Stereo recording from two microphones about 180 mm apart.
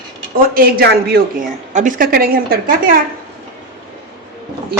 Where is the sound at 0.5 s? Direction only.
55° right (ahead or behind).